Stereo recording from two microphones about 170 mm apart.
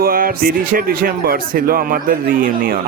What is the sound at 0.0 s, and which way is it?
Speech, 60° right (ahead or behind).